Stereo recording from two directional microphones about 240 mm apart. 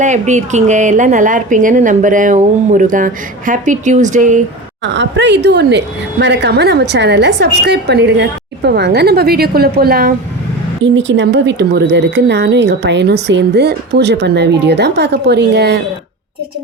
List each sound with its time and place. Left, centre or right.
0.0 s a woman's voice: right
4.8 s a woman's voice: right